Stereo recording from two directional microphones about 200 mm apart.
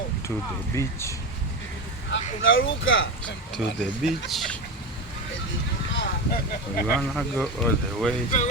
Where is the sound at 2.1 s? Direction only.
70° left (ahead or behind).